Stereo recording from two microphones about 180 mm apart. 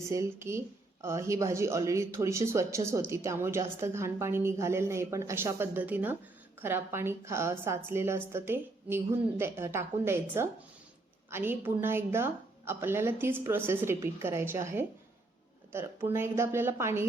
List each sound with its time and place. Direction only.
0.1 s a woman's voice: 15° right (ahead or behind)